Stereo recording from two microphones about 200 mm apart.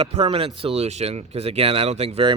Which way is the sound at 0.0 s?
30° right (ahead or behind).